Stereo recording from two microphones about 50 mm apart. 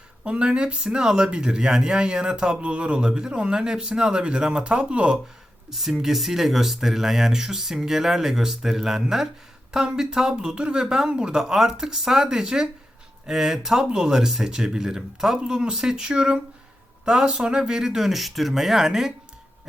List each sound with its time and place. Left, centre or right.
0.3 s speech: centre
5.7 s speech: centre